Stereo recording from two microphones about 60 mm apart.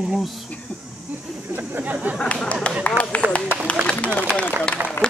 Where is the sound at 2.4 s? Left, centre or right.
Centre.